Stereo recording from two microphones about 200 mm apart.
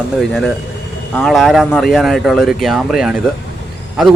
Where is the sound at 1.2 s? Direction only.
Centre (ahead or behind).